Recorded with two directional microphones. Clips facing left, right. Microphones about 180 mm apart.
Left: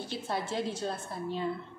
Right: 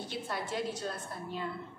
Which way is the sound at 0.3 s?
25° left (ahead or behind).